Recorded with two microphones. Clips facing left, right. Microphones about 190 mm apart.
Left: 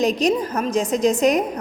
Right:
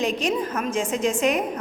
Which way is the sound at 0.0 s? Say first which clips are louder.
Left 5 dB; 40° left (ahead or behind).